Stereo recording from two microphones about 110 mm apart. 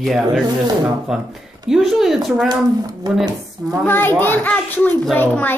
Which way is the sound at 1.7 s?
5° right (ahead or behind).